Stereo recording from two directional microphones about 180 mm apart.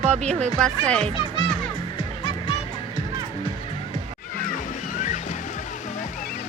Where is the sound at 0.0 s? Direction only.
40° right (ahead or behind).